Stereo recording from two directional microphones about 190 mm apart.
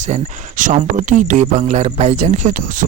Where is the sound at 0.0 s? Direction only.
40° right (ahead or behind).